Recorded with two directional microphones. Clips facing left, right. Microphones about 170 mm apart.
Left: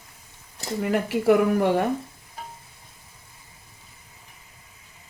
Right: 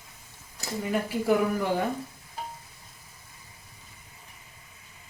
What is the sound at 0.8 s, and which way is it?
Speech, 75° left (ahead or behind).